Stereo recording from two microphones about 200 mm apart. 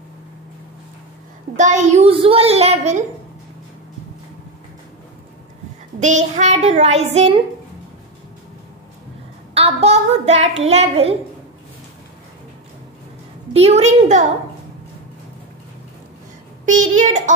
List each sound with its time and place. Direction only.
1.6 s a child's voice: 35° right (ahead or behind)
5.9 s a child's voice: 35° right (ahead or behind)
9.5 s child singing: 30° right (ahead or behind)
10.6 s a child's voice: 30° right (ahead or behind)
13.5 s a child's voice: 30° right (ahead or behind)
16.6 s a child's voice: 40° right (ahead or behind)